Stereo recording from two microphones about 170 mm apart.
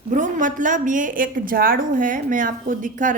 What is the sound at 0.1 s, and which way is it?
A woman's voice, 50° right (ahead or behind).